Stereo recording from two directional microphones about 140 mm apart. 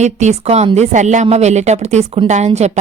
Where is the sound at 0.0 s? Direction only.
55° right (ahead or behind).